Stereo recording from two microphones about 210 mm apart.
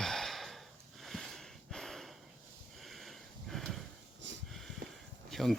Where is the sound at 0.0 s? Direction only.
Centre (ahead or behind).